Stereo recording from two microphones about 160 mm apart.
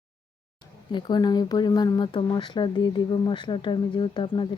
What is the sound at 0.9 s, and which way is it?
A woman's voice, 30° left (ahead or behind).